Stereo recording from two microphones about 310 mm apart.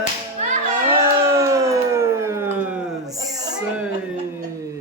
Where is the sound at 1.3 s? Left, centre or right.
Centre.